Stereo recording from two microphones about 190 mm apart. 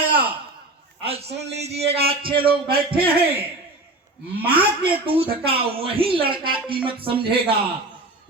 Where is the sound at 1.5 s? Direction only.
35° right (ahead or behind).